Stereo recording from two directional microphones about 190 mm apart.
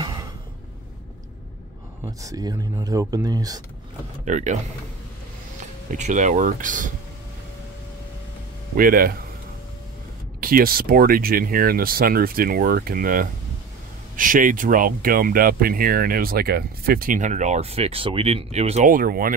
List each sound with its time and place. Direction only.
0.0 s a sound: 20° right (ahead or behind)
2.0 s speech: 20° right (ahead or behind)
4.2 s speech: 40° right (ahead or behind)
5.9 s speech: 40° right (ahead or behind)
8.7 s speech: 50° right (ahead or behind)
10.4 s speech: 50° right (ahead or behind)